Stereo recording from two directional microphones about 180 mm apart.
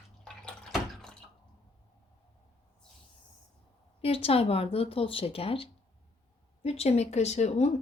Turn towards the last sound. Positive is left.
turn(degrees=40)  # may be behind; listen again after turning